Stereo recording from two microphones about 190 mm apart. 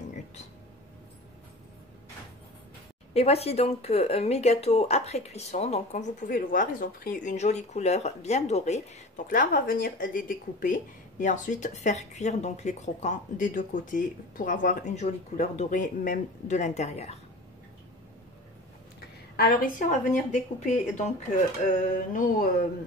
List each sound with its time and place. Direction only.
3.2 s speech: 30° left (ahead or behind)
19.3 s a woman's voice: 50° left (ahead or behind)